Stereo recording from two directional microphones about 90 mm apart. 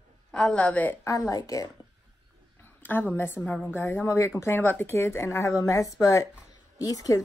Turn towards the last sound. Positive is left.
turn(degrees=40)  # may be behind; listen again after turning